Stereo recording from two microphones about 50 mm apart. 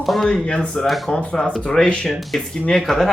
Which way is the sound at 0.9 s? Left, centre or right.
Centre.